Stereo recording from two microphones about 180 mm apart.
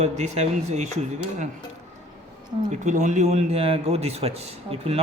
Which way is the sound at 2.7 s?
40° right (ahead or behind).